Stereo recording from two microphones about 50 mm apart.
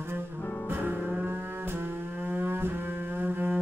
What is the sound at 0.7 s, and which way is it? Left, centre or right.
Music, right.